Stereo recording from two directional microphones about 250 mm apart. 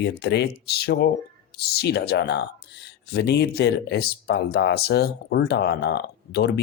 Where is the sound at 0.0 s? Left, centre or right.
Left.